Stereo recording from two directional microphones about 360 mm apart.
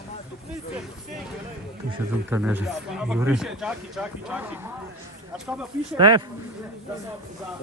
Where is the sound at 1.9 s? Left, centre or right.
Centre.